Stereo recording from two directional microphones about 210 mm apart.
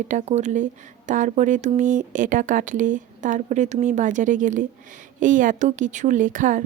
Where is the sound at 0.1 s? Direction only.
35° right (ahead or behind).